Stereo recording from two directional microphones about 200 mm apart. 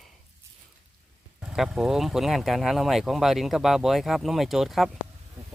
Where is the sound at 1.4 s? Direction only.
5° right (ahead or behind).